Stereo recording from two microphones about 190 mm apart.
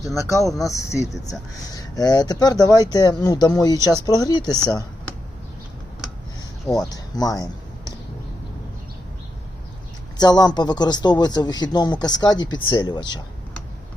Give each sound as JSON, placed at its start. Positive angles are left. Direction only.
{"t": 0.6, "sound": "a man's voice", "side_deg": 15}
{"t": 6.7, "sound": "a man's voice", "side_deg": 20}
{"t": 10.2, "sound": "a man's voice", "side_deg": 20}